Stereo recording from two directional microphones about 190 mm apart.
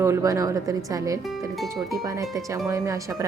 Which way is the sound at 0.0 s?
15° right (ahead or behind).